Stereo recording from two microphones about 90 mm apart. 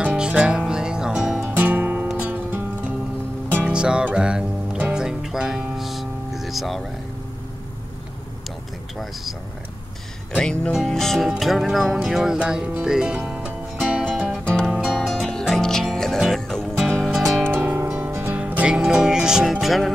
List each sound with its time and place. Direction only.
0.0 s music: 10° right (ahead or behind)
1.4 s music: 20° right (ahead or behind); by 6.8 s centre (ahead or behind)
10.3 s speech: 10° left (ahead or behind)
10.7 s music: centre (ahead or behind)
17.4 s music: 20° right (ahead or behind); by 19.9 s centre (ahead or behind)